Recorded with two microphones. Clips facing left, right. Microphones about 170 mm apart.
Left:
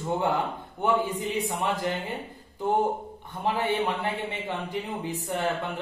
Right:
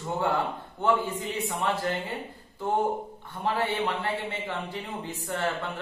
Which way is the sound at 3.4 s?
15° left (ahead or behind).